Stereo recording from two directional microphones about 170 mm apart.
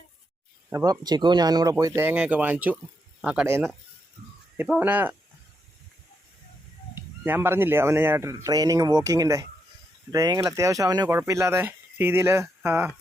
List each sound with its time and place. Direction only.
0.9 s speech: 25° right (ahead or behind); by 3.4 s 5° right (ahead or behind)
4.5 s speech: 10° right (ahead or behind)
7.3 s speech: 15° right (ahead or behind)